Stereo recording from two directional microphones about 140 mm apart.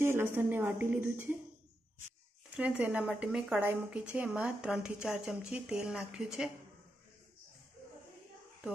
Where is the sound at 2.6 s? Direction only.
10° right (ahead or behind).